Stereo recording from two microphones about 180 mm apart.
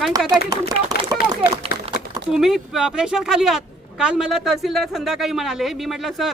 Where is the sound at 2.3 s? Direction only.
Centre (ahead or behind).